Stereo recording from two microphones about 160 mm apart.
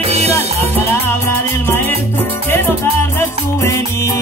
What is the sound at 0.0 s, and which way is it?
Music, 40° right (ahead or behind).